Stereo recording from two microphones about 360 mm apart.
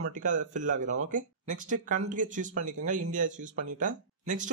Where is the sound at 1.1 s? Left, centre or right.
Right.